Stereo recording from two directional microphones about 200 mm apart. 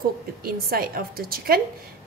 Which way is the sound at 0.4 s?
50° right (ahead or behind).